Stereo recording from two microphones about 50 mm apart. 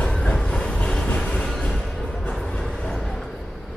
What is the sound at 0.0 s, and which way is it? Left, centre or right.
Train, left.